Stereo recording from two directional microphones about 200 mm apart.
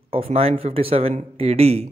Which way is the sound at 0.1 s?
30° right (ahead or behind).